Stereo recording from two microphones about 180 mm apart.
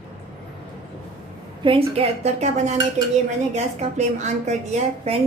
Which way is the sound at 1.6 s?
30° right (ahead or behind).